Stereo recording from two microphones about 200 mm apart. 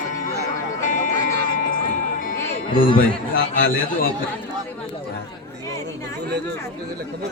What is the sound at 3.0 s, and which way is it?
A man's voice, 45° left (ahead or behind).